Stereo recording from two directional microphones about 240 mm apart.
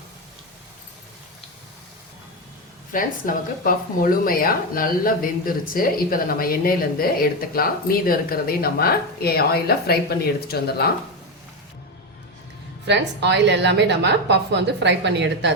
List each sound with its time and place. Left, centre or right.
2.9 s speech: left
12.8 s a woman's voice: right